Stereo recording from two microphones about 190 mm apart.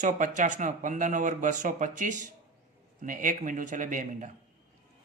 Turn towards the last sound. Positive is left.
turn(degrees=-45)  # may be behind; listen again after turning